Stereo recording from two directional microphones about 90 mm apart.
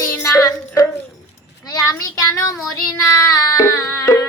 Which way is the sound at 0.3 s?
40° left (ahead or behind).